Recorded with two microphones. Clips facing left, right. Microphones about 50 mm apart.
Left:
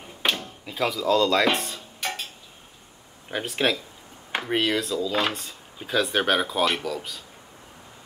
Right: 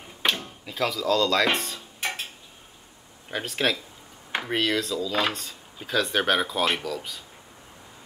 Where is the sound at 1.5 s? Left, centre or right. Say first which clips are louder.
Even; centre.